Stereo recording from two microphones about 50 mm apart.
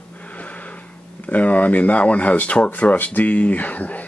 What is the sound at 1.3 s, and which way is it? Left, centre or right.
Speech, left.